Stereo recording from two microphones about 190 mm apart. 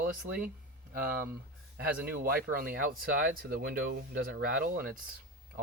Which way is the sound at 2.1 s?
50° right (ahead or behind).